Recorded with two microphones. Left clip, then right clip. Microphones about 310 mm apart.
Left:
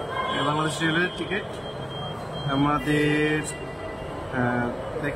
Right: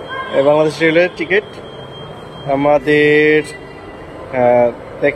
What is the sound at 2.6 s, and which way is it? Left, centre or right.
Speech, centre.